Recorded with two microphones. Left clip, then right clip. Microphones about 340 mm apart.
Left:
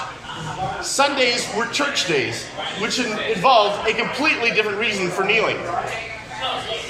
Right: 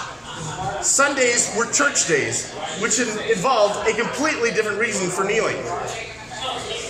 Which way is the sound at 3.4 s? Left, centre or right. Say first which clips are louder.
Left 4 dB; centre.